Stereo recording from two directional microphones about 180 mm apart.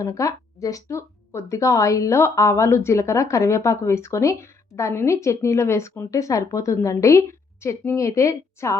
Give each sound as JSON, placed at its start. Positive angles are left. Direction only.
{"t": 0.0, "sound": "speech", "side_deg": 15}